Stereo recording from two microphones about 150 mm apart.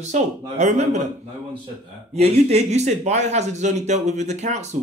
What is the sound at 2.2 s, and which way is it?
Speech, 45° right (ahead or behind).